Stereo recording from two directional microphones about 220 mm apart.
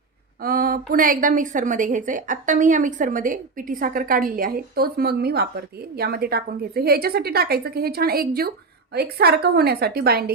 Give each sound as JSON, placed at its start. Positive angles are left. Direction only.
{"t": 0.4, "sound": "a woman's voice", "side_deg": -40}